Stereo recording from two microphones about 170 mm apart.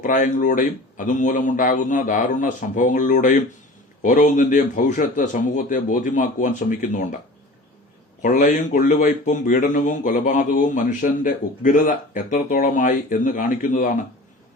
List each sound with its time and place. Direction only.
0.0 s speech: 50° left (ahead or behind)
8.2 s speech: 50° left (ahead or behind)